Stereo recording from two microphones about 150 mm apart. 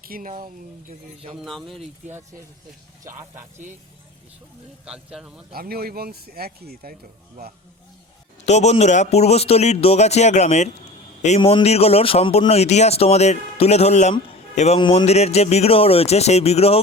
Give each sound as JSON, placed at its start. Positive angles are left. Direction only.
{"t": 0.0, "sound": "speech", "side_deg": -70}
{"t": 1.4, "sound": "a man's voice", "side_deg": 0}
{"t": 4.9, "sound": "a man's voice", "side_deg": -5}
{"t": 5.5, "sound": "speech", "side_deg": -90}
{"t": 8.4, "sound": "speech", "side_deg": 50}
{"t": 11.3, "sound": "speech", "side_deg": 35}
{"t": 14.8, "sound": "speech", "side_deg": 35}